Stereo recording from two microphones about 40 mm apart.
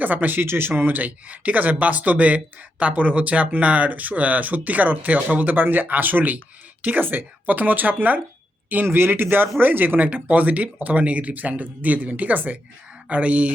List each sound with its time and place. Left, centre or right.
0.0 s speech: right
0.4 s speech: right
0.7 s speech: right